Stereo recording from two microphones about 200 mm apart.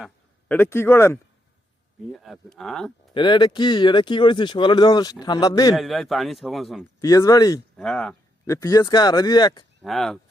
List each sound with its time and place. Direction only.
0.0 s speech: 10° left (ahead or behind)
2.1 s speech: centre (ahead or behind)
3.2 s speech: 25° left (ahead or behind)
5.7 s speech: centre (ahead or behind)
7.0 s speech: 15° left (ahead or behind)
7.8 s speech: 5° left (ahead or behind)
8.4 s speech: 20° left (ahead or behind)
9.8 s speech: centre (ahead or behind)